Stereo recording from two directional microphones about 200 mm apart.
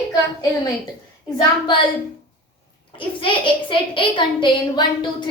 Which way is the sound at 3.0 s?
25° left (ahead or behind).